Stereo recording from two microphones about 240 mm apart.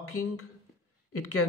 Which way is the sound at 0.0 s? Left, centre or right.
Left.